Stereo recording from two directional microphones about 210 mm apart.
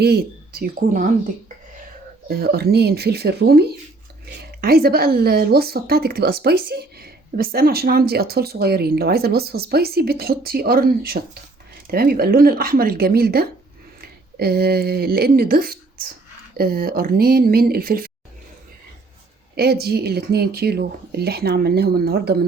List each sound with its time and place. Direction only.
0.0 s speech: 50° right (ahead or behind)
2.2 s speech: 50° right (ahead or behind)
19.5 s speech: 50° right (ahead or behind)